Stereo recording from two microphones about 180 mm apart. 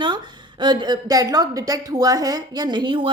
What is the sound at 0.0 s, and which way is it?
A woman's voice, 25° right (ahead or behind).